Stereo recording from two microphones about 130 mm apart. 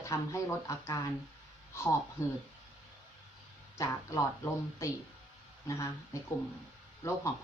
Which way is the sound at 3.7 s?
25° left (ahead or behind).